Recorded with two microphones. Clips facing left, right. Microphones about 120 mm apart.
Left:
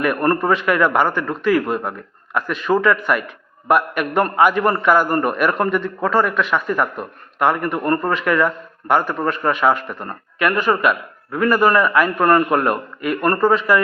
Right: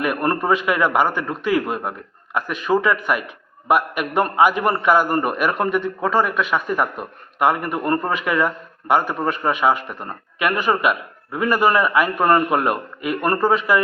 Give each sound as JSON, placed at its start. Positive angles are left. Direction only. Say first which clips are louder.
{"t": 0.0, "sound": "a man's voice", "louder": "left 3 dB", "side_deg": -15}